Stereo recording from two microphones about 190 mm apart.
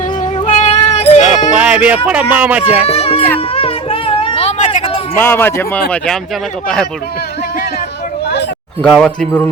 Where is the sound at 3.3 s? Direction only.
30° left (ahead or behind).